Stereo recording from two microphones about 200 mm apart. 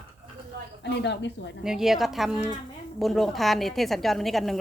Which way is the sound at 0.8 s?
60° left (ahead or behind).